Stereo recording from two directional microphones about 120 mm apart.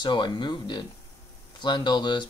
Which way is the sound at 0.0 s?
40° left (ahead or behind).